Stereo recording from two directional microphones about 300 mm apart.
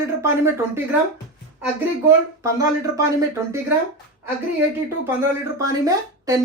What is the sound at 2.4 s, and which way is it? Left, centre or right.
Speech, centre.